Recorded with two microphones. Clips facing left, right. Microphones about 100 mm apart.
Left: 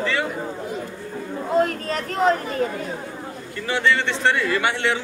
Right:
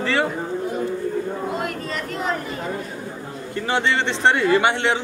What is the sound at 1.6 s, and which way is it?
Speech, 40° left (ahead or behind).